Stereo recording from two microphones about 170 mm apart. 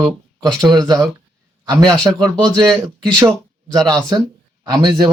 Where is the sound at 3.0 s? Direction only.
25° right (ahead or behind).